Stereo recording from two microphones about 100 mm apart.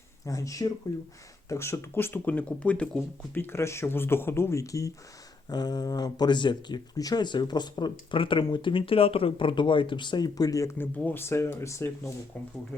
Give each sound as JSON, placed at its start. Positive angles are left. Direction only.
{"t": 0.3, "sound": "speech", "side_deg": 35}
{"t": 3.3, "sound": "speech", "side_deg": 25}
{"t": 5.5, "sound": "speech", "side_deg": 45}
{"t": 10.8, "sound": "speech", "side_deg": 20}